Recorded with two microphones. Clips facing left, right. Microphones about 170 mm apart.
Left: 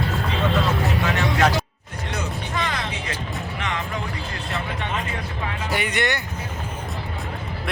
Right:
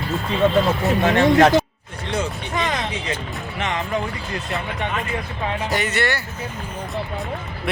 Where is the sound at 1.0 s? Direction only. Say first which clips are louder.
Right 8 dB; 50° right (ahead or behind).